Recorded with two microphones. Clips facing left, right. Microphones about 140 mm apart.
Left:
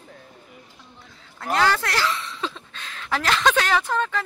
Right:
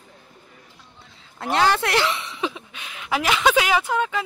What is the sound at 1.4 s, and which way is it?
Speech, 25° right (ahead or behind).